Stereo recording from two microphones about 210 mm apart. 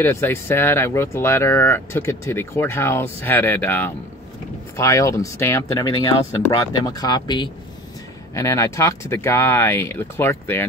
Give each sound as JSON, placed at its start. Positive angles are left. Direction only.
{"t": 0.0, "sound": "speech", "side_deg": 10}